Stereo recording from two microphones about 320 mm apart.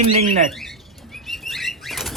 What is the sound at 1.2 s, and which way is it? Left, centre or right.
Bird flight, centre.